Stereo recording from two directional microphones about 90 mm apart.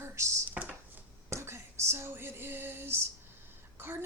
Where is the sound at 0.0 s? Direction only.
35° right (ahead or behind).